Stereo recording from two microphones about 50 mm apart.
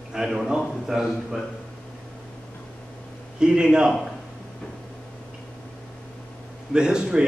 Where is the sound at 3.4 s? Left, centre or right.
Centre.